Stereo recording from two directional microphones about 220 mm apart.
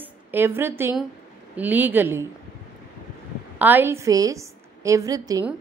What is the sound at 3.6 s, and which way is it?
A woman's voice, 10° right (ahead or behind).